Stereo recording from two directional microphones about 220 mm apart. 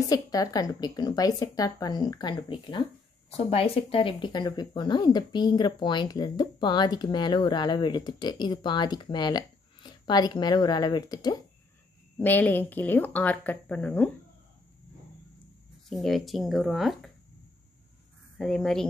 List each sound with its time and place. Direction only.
0.1 s speech: 15° left (ahead or behind)
15.9 s speech: centre (ahead or behind)
18.4 s speech: centre (ahead or behind)